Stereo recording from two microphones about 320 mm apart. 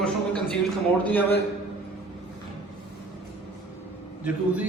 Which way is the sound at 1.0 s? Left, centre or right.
Centre.